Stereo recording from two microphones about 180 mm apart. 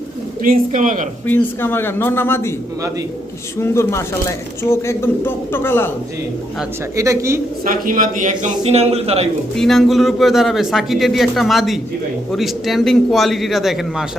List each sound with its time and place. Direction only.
0.4 s a man's voice: 45° right (ahead or behind)
1.3 s speech: 10° left (ahead or behind)
3.6 s speech: 15° left (ahead or behind)
6.9 s speech: 15° right (ahead or behind)
7.6 s a man's voice: 50° right (ahead or behind); by 9.3 s 35° right (ahead or behind)
9.6 s a man's voice: centre (ahead or behind)